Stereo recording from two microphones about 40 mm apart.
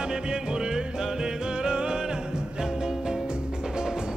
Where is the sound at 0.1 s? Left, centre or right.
Centre.